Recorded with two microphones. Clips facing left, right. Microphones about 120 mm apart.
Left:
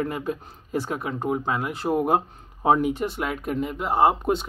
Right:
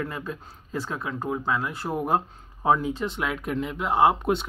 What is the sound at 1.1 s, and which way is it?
Speech, 20° left (ahead or behind).